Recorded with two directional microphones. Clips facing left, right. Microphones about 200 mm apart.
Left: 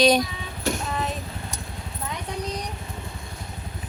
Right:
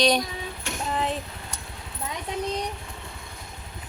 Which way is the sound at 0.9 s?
30° right (ahead or behind).